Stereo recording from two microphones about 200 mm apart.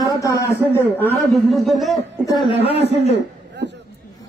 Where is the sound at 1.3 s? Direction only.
Centre (ahead or behind).